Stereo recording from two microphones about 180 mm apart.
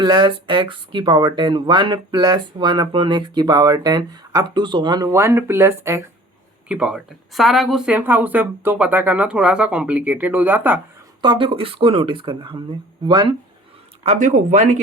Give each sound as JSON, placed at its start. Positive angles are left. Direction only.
{"t": 0.0, "sound": "speech", "side_deg": -25}
{"t": 11.2, "sound": "speech", "side_deg": -25}
{"t": 14.0, "sound": "speech", "side_deg": -40}